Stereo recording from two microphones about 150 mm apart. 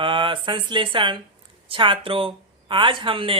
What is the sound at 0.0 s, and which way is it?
Speech, 35° right (ahead or behind).